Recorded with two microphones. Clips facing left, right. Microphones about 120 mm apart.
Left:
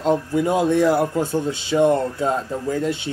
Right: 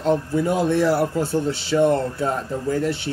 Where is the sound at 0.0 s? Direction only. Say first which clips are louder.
Left 1 dB; 20° left (ahead or behind).